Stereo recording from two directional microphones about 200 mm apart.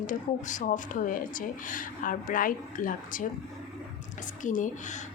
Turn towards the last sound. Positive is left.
turn(degrees=40)  # may be behind; listen again after turning